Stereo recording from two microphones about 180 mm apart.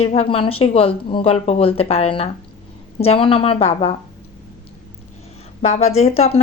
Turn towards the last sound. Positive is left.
turn(degrees=35)  # may be behind; listen again after turning